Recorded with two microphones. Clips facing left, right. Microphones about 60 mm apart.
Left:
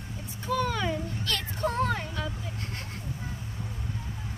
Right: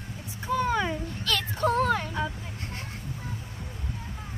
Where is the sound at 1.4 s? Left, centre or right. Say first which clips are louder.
Right 4 dB; right.